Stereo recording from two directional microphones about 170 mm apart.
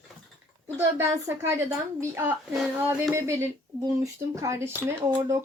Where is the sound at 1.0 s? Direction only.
15° right (ahead or behind).